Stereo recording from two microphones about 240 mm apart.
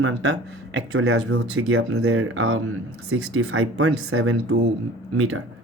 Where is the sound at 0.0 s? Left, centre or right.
Right.